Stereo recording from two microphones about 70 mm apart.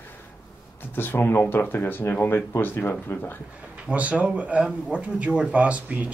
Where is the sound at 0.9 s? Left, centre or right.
Left.